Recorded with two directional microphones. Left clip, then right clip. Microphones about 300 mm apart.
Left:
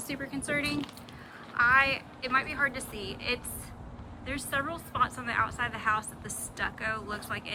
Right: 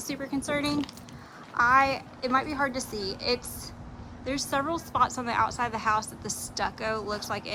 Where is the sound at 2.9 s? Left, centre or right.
Right.